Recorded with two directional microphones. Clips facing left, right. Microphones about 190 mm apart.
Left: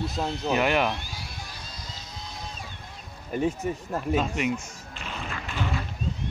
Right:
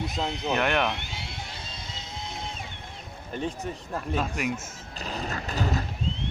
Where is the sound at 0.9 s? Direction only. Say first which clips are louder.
Right 1 dB; 25° right (ahead or behind).